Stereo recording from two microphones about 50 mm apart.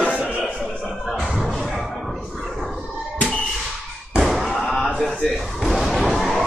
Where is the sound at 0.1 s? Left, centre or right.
Right.